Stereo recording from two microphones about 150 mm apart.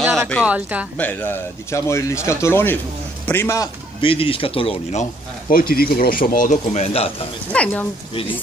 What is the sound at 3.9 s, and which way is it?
Speech, 35° left (ahead or behind).